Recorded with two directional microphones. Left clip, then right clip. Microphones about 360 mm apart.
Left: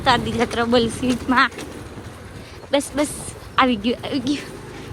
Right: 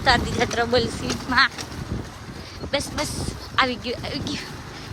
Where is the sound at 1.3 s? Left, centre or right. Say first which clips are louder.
Left 1 dB; centre.